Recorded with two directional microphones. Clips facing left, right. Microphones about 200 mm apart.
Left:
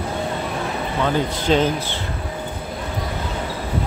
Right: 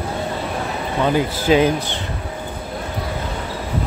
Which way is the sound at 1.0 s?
10° right (ahead or behind).